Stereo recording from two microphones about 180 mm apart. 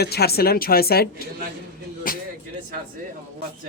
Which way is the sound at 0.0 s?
60° left (ahead or behind).